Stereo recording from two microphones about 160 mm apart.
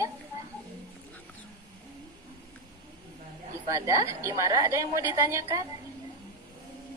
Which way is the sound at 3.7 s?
20° right (ahead or behind).